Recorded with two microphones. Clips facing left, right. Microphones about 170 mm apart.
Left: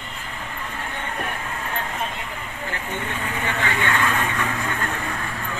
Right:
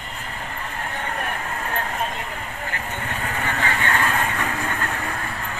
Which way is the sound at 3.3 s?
40° right (ahead or behind).